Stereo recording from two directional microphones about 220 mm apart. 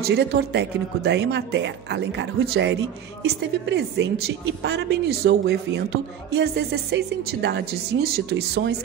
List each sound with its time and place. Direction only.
0.0 s speech: 50° right (ahead or behind)